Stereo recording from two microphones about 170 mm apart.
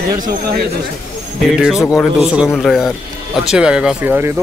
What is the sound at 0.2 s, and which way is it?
Speech, 60° right (ahead or behind).